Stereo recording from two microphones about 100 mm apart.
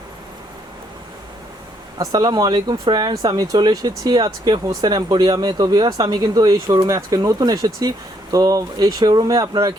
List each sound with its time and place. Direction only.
2.0 s speech: 45° right (ahead or behind)